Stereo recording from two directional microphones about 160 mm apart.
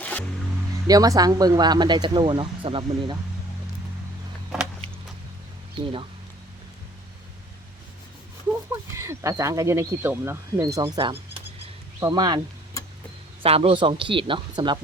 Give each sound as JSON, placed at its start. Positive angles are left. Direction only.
{"t": 0.9, "sound": "speech", "side_deg": -20}
{"t": 5.7, "sound": "speech", "side_deg": -35}
{"t": 8.7, "sound": "speech", "side_deg": -20}
{"t": 13.4, "sound": "speech", "side_deg": -35}